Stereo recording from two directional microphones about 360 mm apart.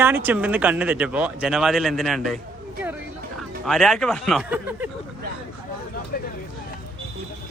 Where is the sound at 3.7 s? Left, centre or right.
Centre.